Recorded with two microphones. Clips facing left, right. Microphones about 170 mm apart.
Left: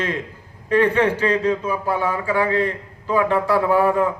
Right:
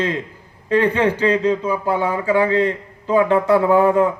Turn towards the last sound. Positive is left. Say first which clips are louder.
# right 3 dB
turn(degrees=-20)  # may be behind; listen again after turning